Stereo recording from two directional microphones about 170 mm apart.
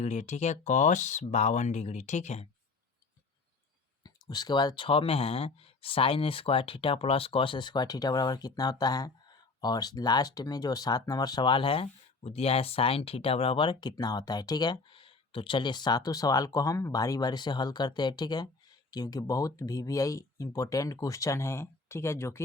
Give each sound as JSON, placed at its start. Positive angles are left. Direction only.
{"t": 0.0, "sound": "speech", "side_deg": 45}
{"t": 4.0, "sound": "speech", "side_deg": 25}